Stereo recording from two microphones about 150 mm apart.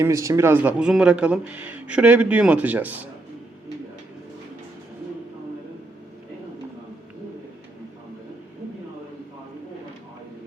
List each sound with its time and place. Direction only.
0.0 s a man's voice: 20° right (ahead or behind)